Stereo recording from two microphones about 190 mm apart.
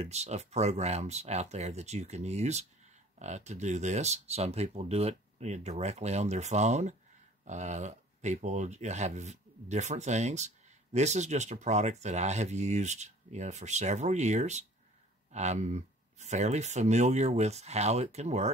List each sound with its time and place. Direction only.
0.0 s speech: 35° right (ahead or behind)